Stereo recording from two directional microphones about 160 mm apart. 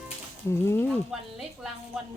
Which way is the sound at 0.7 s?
15° left (ahead or behind).